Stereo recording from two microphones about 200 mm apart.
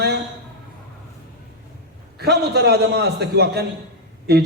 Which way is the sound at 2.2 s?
55° right (ahead or behind).